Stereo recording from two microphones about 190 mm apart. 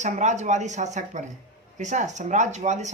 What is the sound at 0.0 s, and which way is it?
Speech, 40° right (ahead or behind).